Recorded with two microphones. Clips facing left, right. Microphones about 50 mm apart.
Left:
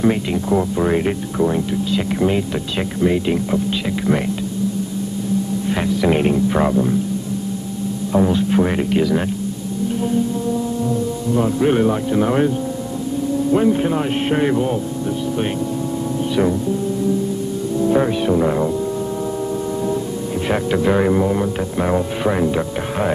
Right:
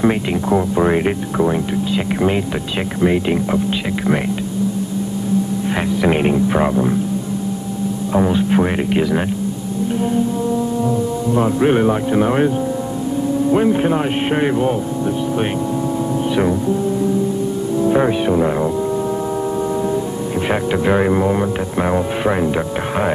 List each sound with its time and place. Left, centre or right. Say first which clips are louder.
0.0 s speech: right 1 dB; centre
5.8 s speech: right 1 dB; centre
8.1 s speech: right 1 dB; centre
11.3 s speech: right 1 dB; centre
16.3 s speech: even; centre
17.7 s speech: right 1 dB; centre
20.4 s speech: even; centre